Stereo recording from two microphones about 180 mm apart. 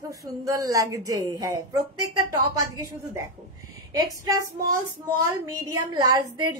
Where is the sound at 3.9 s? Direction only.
20° right (ahead or behind).